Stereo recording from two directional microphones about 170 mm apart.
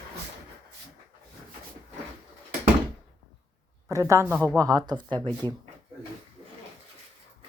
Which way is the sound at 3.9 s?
15° right (ahead or behind).